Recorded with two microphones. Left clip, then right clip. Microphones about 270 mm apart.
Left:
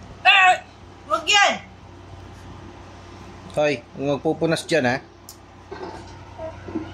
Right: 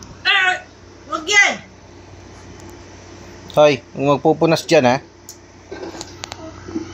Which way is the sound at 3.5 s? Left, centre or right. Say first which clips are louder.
Right 9 dB; centre.